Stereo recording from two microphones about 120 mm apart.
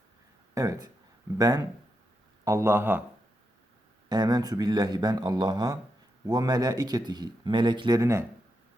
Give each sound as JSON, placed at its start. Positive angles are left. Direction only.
{"t": 0.5, "sound": "speech", "side_deg": -25}
{"t": 4.1, "sound": "speech", "side_deg": -35}